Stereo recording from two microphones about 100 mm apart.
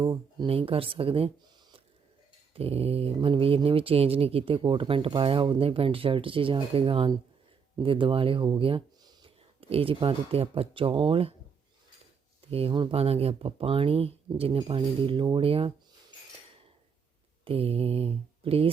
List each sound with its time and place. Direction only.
0.0 s speech: 50° right (ahead or behind)
0.4 s speech: 70° right (ahead or behind)
2.6 s speech: 80° right
12.5 s speech: 75° right (ahead or behind); by 15.3 s 60° right (ahead or behind)
15.4 s speech: 75° right (ahead or behind)
17.4 s speech: 75° right (ahead or behind)